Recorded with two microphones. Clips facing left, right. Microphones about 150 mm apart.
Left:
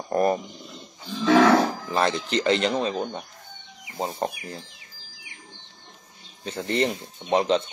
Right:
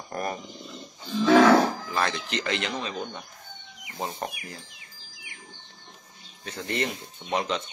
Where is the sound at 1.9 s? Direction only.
30° left (ahead or behind).